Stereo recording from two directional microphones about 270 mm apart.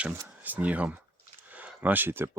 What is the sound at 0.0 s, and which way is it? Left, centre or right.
Speech, centre.